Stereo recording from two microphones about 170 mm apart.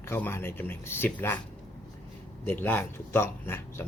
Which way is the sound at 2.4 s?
10° left (ahead or behind).